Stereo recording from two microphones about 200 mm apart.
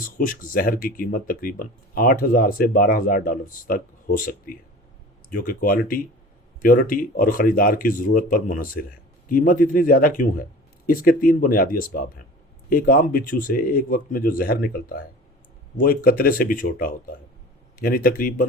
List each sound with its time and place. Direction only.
0.0 s speech: 45° left (ahead or behind)